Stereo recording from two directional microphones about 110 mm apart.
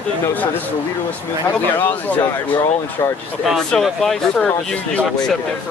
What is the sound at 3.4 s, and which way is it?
Speech, centre (ahead or behind).